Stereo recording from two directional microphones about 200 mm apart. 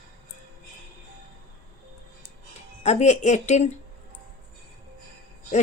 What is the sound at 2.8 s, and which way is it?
Speech, 35° left (ahead or behind).